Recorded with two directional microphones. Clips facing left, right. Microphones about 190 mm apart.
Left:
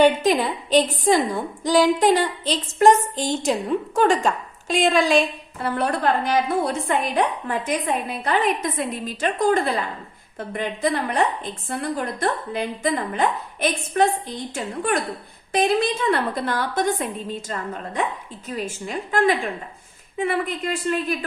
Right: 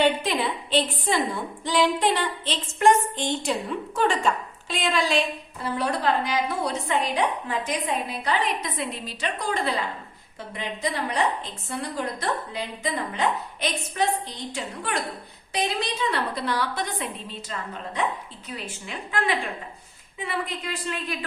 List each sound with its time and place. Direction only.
0.0 s a woman's voice: 40° left (ahead or behind)